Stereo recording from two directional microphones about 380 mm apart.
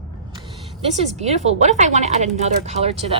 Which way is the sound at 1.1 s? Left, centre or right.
Centre.